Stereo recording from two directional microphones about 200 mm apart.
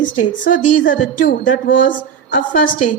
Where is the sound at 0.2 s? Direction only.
40° left (ahead or behind).